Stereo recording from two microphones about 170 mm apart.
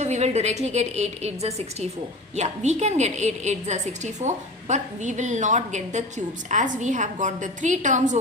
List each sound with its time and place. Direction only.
0.0 s a woman's voice: 40° right (ahead or behind)